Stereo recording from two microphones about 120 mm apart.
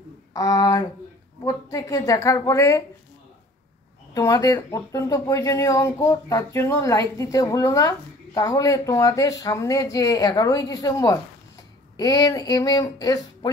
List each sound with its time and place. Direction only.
0.3 s speech: 30° left (ahead or behind)
4.1 s speech: 30° left (ahead or behind)